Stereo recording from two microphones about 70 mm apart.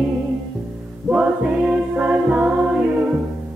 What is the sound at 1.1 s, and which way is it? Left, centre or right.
Music, centre.